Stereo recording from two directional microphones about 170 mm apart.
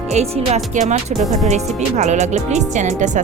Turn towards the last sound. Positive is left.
turn(degrees=-45)  # may be behind; listen again after turning